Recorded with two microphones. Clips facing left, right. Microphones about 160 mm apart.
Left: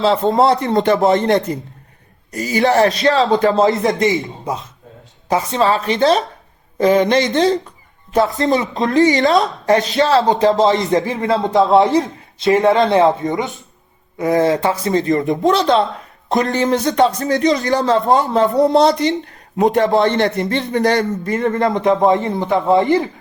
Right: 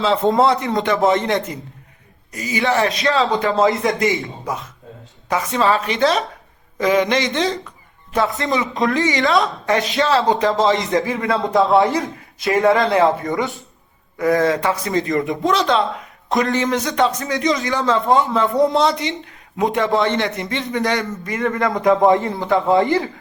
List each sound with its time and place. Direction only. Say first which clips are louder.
0.0 s a man's voice: left 2 dB; 35° left (ahead or behind)